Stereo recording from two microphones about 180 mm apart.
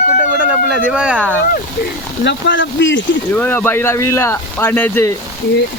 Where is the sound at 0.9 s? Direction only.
5° right (ahead or behind).